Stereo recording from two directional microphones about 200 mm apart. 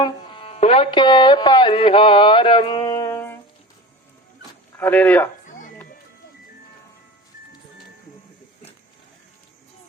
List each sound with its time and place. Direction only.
0.0 s speech: 25° left (ahead or behind)
4.8 s speech: 10° left (ahead or behind)